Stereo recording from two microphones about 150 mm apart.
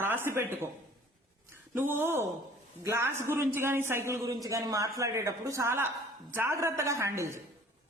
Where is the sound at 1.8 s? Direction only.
15° right (ahead or behind).